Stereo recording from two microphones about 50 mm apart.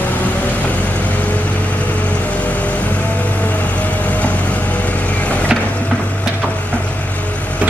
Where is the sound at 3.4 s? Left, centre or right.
Left.